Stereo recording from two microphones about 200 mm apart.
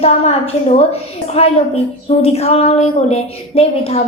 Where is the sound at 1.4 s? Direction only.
30° left (ahead or behind).